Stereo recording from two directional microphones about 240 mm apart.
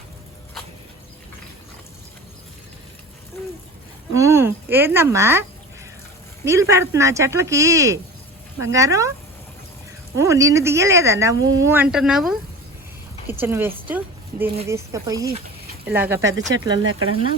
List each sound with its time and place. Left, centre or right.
4.1 s a woman's voice: centre
10.2 s a woman's voice: centre
16.5 s speech: right